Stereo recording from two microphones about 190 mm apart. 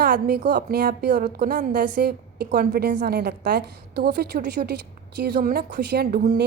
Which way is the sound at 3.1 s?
60° right (ahead or behind).